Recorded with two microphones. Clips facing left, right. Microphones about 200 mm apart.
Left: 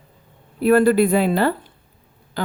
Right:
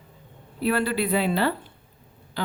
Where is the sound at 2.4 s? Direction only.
50° left (ahead or behind).